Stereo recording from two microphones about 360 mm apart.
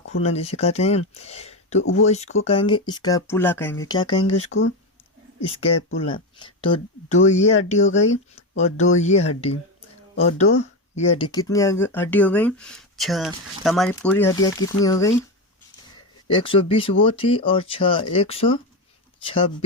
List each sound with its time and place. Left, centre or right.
0.2 s speech: centre
4.5 s speech: left
6.4 s speech: centre
7.9 s speech: left
8.1 s speech: centre
16.3 s speech: centre